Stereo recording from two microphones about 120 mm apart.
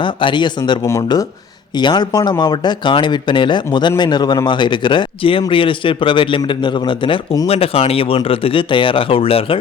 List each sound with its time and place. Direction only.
0.0 s speech: 45° left (ahead or behind)